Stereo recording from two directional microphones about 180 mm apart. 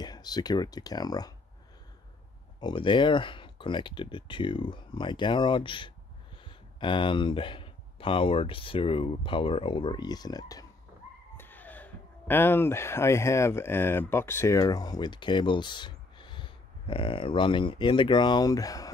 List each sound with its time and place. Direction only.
0.0 s speech: 20° left (ahead or behind)
2.6 s speech: 25° left (ahead or behind)
11.3 s speech: 10° left (ahead or behind)